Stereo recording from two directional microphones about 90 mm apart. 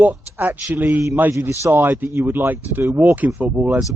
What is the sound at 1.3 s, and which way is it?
Speech, 35° right (ahead or behind).